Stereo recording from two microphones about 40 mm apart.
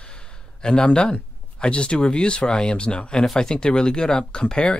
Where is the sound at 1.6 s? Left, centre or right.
Left.